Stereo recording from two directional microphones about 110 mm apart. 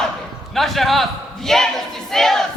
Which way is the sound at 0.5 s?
Centre (ahead or behind).